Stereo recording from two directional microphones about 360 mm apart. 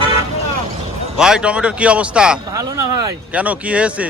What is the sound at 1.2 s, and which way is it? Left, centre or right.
Speech, centre.